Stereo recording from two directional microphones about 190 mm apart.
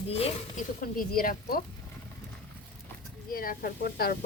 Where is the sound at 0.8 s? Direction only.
50° left (ahead or behind).